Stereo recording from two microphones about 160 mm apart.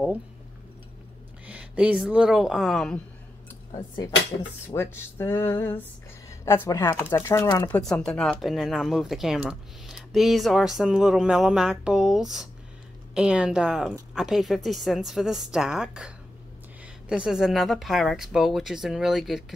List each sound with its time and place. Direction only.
1.5 s speech: 5° right (ahead or behind)
4.7 s speech: 15° left (ahead or behind)
7.7 s speech: 5° left (ahead or behind)
17.1 s speech: 5° right (ahead or behind)